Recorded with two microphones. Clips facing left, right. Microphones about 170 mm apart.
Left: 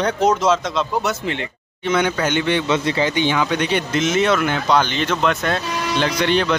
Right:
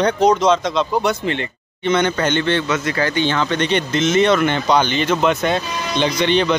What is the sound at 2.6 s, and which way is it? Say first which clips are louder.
Speech: left 1 dB; 25° left (ahead or behind).